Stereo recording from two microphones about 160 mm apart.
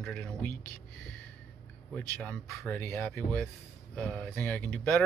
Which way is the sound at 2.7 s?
15° left (ahead or behind).